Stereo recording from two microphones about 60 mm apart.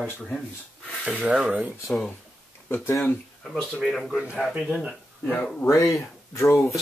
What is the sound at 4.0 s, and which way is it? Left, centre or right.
Speech, centre.